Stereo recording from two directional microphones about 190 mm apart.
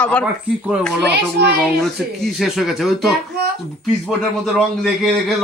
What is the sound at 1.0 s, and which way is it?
Speech, 60° right (ahead or behind).